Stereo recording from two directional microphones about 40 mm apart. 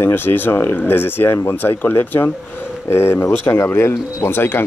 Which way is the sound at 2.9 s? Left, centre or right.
Left.